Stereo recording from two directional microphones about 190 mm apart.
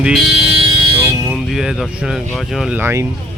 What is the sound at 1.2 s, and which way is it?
Speech, centre (ahead or behind).